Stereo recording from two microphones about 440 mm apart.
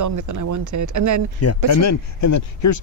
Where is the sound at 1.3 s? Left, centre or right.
Left.